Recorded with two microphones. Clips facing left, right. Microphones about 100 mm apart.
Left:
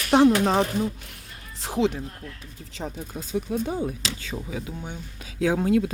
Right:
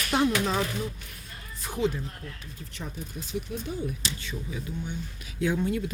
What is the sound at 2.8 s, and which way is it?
Speech, 70° left (ahead or behind).